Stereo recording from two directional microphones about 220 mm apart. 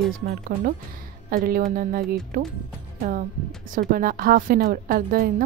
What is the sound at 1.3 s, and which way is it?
Speech, 40° right (ahead or behind).